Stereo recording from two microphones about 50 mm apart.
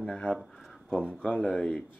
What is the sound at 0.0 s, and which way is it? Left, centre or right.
Speech, left.